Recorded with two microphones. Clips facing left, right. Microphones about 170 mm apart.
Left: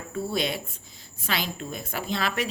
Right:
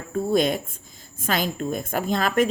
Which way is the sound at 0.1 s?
45° right (ahead or behind).